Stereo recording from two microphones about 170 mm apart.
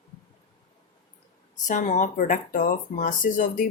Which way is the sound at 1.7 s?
45° left (ahead or behind).